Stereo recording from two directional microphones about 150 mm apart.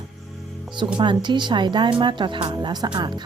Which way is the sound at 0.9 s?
30° right (ahead or behind).